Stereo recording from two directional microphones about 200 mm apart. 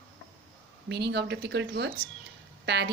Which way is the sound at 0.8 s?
60° right (ahead or behind).